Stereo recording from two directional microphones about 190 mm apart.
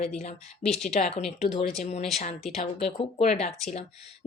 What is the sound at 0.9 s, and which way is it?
Speech, 35° left (ahead or behind).